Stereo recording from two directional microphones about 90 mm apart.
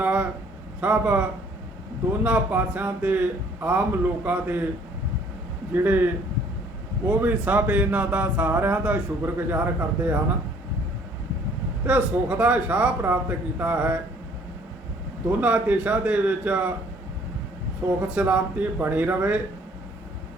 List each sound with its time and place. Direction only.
0.0 s a sound: 15° right (ahead or behind)
0.8 s speech: 15° right (ahead or behind)
5.7 s speech: 20° right (ahead or behind)
7.1 s speech: 15° right (ahead or behind)
11.9 s speech: 15° right (ahead or behind)
15.4 s speech: 15° right (ahead or behind)
18.1 s speech: 15° right (ahead or behind)